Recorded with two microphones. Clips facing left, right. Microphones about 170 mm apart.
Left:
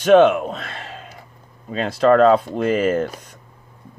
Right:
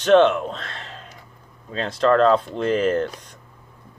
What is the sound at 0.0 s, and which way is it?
Speech, 10° left (ahead or behind).